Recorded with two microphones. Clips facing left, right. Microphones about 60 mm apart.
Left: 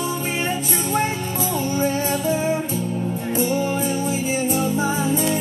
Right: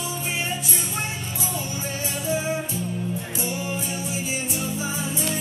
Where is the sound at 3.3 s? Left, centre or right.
Left.